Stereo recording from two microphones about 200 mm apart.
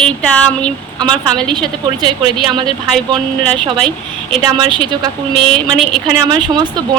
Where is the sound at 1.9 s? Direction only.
20° right (ahead or behind).